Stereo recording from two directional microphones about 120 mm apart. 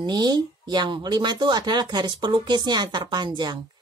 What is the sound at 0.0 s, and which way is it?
Speech, 35° right (ahead or behind).